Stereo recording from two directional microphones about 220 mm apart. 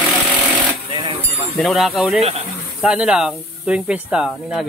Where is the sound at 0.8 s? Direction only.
20° right (ahead or behind).